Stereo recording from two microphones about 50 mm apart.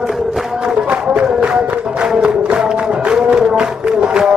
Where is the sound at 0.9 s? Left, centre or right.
Right.